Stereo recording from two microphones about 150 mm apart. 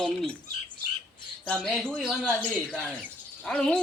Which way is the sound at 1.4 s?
10° left (ahead or behind).